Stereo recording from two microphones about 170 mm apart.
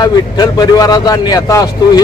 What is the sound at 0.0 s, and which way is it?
A man's voice, 25° left (ahead or behind).